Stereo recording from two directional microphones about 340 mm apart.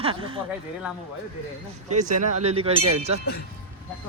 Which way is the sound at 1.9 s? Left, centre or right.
Right.